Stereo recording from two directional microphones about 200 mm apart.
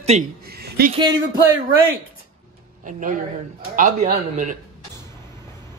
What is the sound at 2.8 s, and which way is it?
A man's voice, 40° right (ahead or behind).